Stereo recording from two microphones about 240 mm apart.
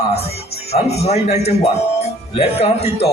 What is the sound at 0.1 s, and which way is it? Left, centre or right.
Speech, left.